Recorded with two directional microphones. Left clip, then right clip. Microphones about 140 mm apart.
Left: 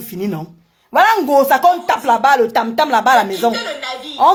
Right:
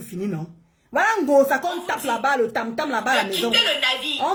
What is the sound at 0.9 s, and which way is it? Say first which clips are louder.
Speech: left 6 dB; 15° right (ahead or behind).